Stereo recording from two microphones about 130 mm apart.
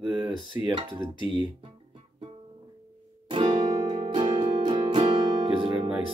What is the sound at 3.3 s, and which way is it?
Music, 35° right (ahead or behind).